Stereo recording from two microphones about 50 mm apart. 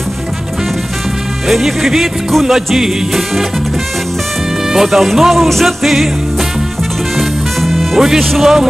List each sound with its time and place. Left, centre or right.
1.5 s music: centre
4.7 s music: centre
7.7 s speech: centre